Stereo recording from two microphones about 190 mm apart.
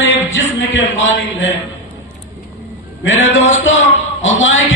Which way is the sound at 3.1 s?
90° left.